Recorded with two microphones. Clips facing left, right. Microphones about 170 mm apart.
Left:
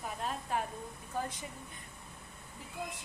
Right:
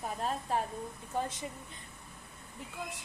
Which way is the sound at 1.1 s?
25° right (ahead or behind).